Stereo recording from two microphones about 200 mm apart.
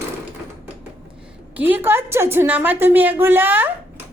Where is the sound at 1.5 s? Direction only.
10° right (ahead or behind).